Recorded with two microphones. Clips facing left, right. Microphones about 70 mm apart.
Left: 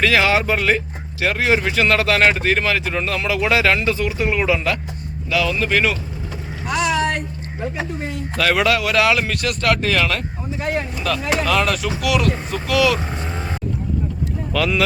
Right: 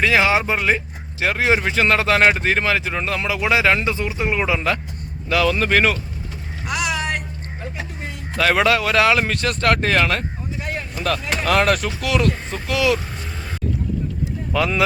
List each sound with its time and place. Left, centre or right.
0.0 s speech: centre
5.3 s speech: right
8.4 s speech: right
10.9 s chop: right
11.4 s speech: right
12.0 s speech: right
14.5 s speech: right